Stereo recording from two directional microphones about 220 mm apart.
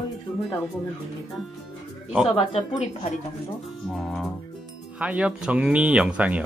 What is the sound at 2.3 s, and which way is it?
Speech, 25° left (ahead or behind).